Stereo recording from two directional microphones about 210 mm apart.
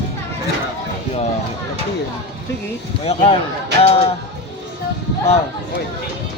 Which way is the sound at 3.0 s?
30° left (ahead or behind).